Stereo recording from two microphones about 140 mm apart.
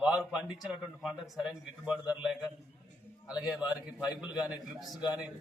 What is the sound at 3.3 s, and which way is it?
A man's voice, 5° right (ahead or behind).